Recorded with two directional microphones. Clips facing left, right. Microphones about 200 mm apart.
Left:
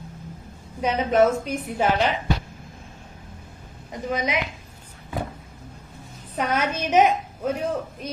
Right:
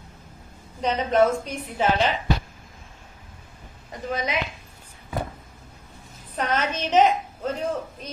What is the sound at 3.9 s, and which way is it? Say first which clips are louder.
Speech: left 2 dB; 15° left (ahead or behind).